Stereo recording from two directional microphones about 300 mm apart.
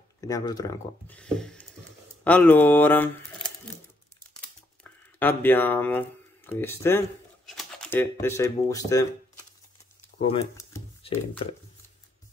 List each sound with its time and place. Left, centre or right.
0.2 s speech: centre
5.2 s speech: centre
10.3 s speech: centre